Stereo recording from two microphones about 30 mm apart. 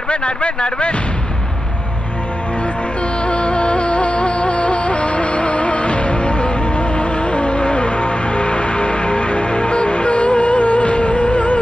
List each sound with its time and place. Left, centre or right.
0.1 s speech: left
3.3 s music: left